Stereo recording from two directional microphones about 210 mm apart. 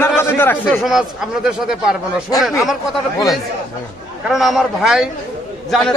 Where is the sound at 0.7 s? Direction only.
Centre (ahead or behind).